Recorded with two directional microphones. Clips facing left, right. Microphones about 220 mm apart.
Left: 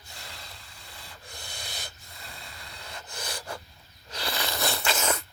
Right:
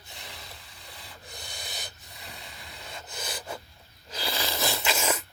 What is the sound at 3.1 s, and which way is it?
Snort, 5° right (ahead or behind).